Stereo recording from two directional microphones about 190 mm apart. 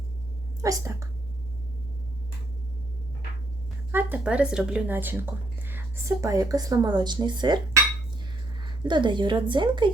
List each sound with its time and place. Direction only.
0.6 s a woman's voice: 15° right (ahead or behind)
3.9 s a woman's voice: 5° right (ahead or behind); by 9.9 s 25° right (ahead or behind)